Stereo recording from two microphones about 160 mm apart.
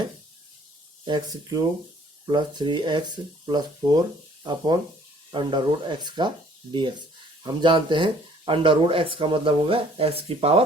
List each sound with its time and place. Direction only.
1.0 s speech: 25° right (ahead or behind)